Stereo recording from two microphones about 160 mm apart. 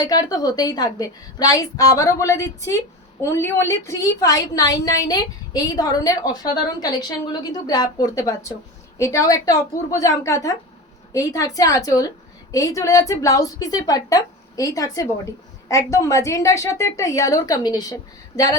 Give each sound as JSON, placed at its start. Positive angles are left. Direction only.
{"t": 0.0, "sound": "a woman's voice", "side_deg": 25}